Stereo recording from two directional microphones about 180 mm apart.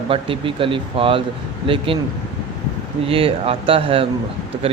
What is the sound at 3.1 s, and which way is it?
Speech, 30° right (ahead or behind).